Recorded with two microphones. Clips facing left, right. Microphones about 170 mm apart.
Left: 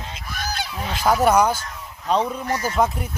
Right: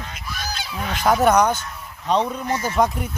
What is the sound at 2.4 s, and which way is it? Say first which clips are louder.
Speech: even; 25° right (ahead or behind).